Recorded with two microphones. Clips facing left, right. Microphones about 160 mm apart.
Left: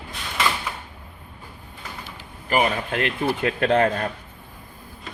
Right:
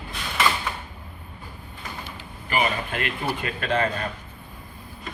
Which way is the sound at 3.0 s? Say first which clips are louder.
Left 8 dB; 70° left (ahead or behind).